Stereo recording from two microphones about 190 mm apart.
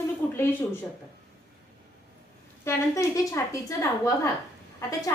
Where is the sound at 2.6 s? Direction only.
15° left (ahead or behind).